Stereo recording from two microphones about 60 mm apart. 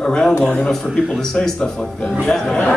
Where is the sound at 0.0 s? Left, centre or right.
Centre.